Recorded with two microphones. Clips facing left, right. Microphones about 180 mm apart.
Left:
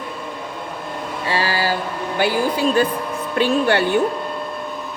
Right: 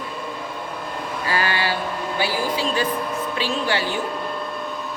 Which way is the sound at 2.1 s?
50° left (ahead or behind).